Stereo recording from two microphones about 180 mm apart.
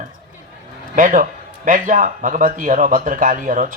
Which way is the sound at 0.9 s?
45° right (ahead or behind).